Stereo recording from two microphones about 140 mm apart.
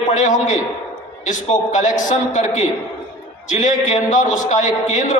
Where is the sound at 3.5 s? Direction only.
60° left (ahead or behind).